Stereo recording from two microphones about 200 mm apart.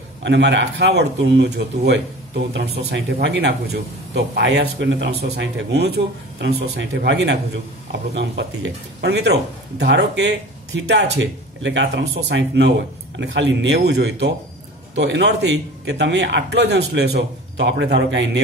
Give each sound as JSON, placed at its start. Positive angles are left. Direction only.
{"t": 0.2, "sound": "speech", "side_deg": -60}